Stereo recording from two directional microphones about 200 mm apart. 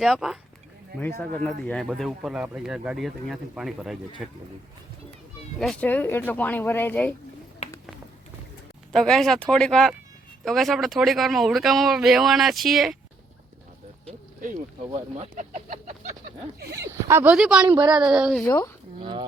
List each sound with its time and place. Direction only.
0.0 s speech: centre (ahead or behind)
1.5 s speech: 5° left (ahead or behind)
5.5 s speech: 5° left (ahead or behind)
8.9 s speech: centre (ahead or behind)
14.9 s speech: 35° right (ahead or behind)
16.7 s speech: 15° right (ahead or behind)
17.7 s speech: 20° right (ahead or behind)
18.1 s speech: 5° right (ahead or behind)
18.4 s speech: 15° left (ahead or behind)
18.9 s speech: 25° right (ahead or behind)